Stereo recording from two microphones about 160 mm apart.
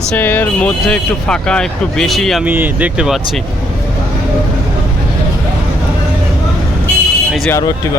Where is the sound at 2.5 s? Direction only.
10° right (ahead or behind).